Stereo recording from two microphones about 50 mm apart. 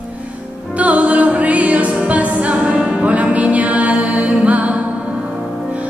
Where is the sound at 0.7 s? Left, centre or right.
Right.